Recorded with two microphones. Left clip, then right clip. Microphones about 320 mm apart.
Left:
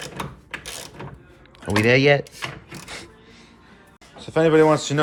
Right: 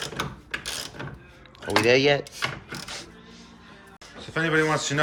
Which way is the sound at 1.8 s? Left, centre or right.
Centre.